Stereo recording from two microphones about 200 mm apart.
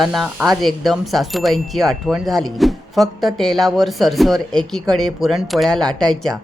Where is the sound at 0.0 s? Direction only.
Centre (ahead or behind).